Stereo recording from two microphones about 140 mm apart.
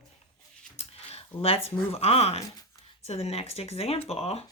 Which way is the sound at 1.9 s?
45° left (ahead or behind).